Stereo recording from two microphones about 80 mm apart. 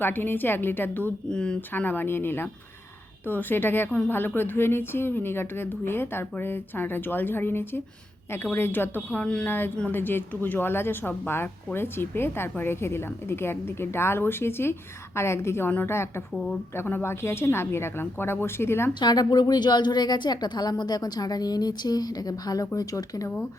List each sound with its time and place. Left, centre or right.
0.0 s speech: left
1.3 s speech: centre
1.7 s speech: left
9.5 s speech: left
18.9 s a woman's voice: left